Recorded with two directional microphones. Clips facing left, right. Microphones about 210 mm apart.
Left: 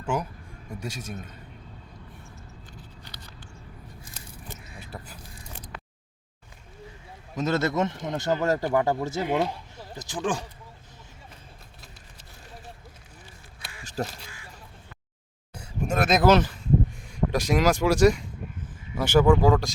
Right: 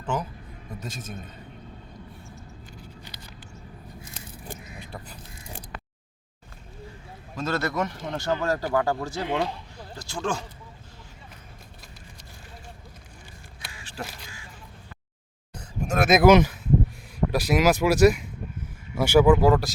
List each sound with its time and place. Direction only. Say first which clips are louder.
0.0 s a man's voice: left 1 dB; 10° left (ahead or behind)
7.3 s a man's voice: left 2 dB; 20° left (ahead or behind)
9.2 s speech: left 1 dB; 5° left (ahead or behind)
9.7 s a sound: left 1 dB; 20° left (ahead or behind)
13.8 s single-lens reflex camera: left 6 dB; 40° left (ahead or behind)
15.5 s a sound: left 1 dB; 10° left (ahead or behind)
16.0 s speech: right 3 dB; 10° right (ahead or behind)